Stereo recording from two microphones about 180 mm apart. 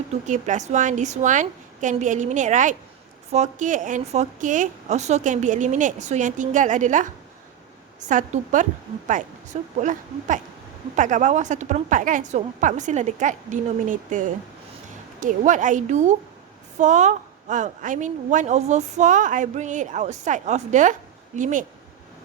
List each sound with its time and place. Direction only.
0.1 s a woman's voice: 40° right (ahead or behind)
9.7 s a woman's voice: 45° right (ahead or behind)